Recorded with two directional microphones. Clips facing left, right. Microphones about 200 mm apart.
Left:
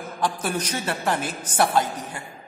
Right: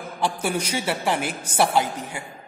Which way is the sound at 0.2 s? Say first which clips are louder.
Right 1 dB; 10° right (ahead or behind).